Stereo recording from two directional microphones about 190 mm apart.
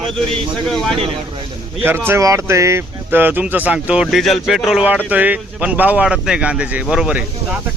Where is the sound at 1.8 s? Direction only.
10° right (ahead or behind).